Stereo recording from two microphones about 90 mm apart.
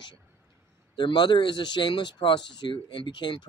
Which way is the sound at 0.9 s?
60° left (ahead or behind).